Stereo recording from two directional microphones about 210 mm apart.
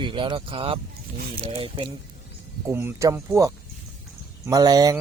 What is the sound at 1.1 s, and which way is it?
Speech, 45° right (ahead or behind).